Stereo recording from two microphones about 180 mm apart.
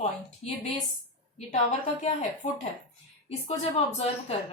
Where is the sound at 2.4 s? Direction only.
45° left (ahead or behind).